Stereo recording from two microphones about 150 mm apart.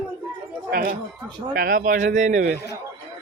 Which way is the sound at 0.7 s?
75° right (ahead or behind).